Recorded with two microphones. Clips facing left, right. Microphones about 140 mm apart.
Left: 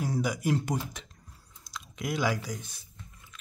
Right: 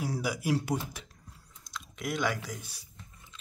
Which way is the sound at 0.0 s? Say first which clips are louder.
Left 3 dB; 10° right (ahead or behind).